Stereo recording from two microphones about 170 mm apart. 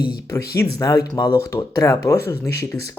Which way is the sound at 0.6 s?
20° left (ahead or behind).